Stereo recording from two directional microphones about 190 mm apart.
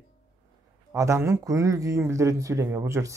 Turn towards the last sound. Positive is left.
turn(degrees=-15)  # may be behind; listen again after turning